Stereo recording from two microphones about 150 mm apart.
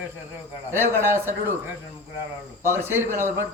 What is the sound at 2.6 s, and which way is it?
Speech, 15° right (ahead or behind).